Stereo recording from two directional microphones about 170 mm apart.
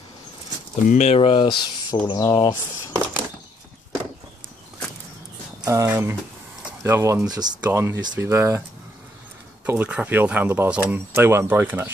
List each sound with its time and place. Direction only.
0.8 s speech: 40° left (ahead or behind); by 2.5 s 20° left (ahead or behind)
5.7 s speech: 15° right (ahead or behind)
9.7 s speech: 10° right (ahead or behind)